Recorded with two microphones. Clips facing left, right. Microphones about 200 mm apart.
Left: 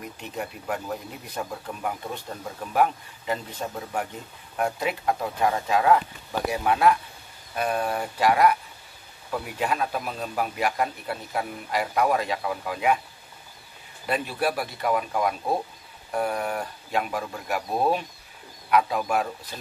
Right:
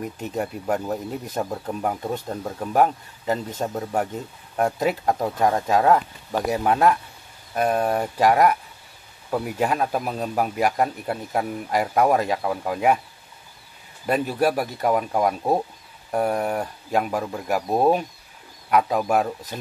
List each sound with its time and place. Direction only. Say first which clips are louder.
0.2 s speech: right 5 dB; 40° right (ahead or behind)
14.0 s speech: right 5 dB; 40° right (ahead or behind)